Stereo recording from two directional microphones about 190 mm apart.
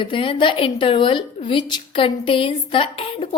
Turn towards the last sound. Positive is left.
turn(degrees=30)  # may be behind; listen again after turning